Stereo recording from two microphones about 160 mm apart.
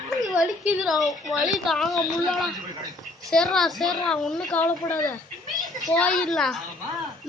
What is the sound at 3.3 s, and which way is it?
A woman's voice, centre (ahead or behind).